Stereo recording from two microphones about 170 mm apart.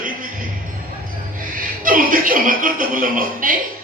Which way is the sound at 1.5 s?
55° right (ahead or behind).